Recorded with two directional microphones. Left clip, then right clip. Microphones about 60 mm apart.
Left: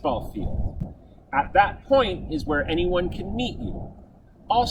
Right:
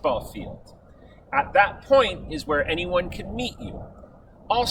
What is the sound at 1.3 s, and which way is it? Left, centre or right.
Speech, right.